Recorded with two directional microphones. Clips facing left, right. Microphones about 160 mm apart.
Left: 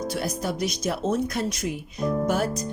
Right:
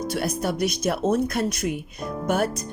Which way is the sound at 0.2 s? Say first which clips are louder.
Right 5 dB; 60° right (ahead or behind).